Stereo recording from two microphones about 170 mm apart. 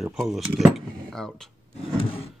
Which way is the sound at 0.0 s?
5° right (ahead or behind).